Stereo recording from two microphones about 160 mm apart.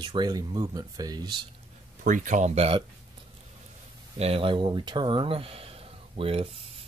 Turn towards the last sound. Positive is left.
turn(degrees=-35)  # may be behind; listen again after turning